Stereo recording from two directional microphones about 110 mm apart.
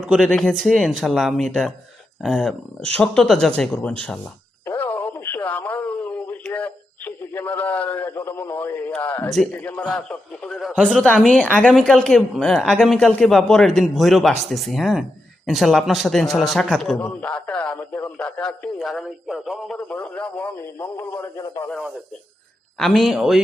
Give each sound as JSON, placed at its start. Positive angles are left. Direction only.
{"t": 0.0, "sound": "speech", "side_deg": -5}
{"t": 0.3, "sound": "a man's voice", "side_deg": 5}
{"t": 4.6, "sound": "a sound", "side_deg": 20}
{"t": 7.5, "sound": "radio", "side_deg": 15}
{"t": 8.9, "sound": "a sound", "side_deg": 15}
{"t": 9.5, "sound": "speech", "side_deg": 15}
{"t": 9.9, "sound": "radio", "side_deg": 10}
{"t": 10.8, "sound": "a man's voice", "side_deg": 10}
{"t": 17.0, "sound": "a man's voice", "side_deg": 10}
{"t": 19.7, "sound": "radio", "side_deg": 10}
{"t": 20.7, "sound": "a sound", "side_deg": 20}
{"t": 21.4, "sound": "radio", "side_deg": 35}
{"t": 22.8, "sound": "a man's voice", "side_deg": 0}